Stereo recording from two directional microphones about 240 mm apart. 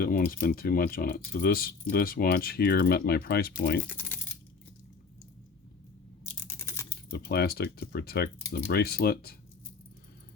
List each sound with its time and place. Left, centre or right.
0.0 s speech: left
3.8 s speech: centre
6.5 s typing: centre
7.1 s speech: left